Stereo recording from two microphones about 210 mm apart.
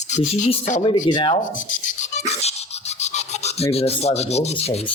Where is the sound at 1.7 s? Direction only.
35° left (ahead or behind).